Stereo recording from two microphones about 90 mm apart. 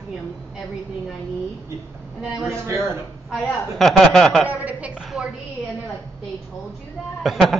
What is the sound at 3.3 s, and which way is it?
A woman's voice, centre (ahead or behind).